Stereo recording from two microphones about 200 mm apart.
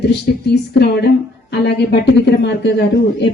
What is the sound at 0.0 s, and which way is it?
Speech, 55° left (ahead or behind).